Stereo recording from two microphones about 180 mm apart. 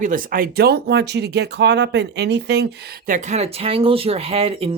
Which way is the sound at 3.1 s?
40° right (ahead or behind).